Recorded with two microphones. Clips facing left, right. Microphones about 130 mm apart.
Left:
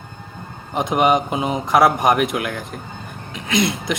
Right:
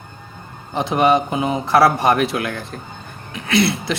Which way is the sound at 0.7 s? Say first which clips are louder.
Right 1 dB; 15° left (ahead or behind).